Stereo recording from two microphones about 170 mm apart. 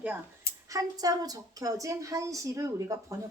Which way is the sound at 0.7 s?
20° right (ahead or behind).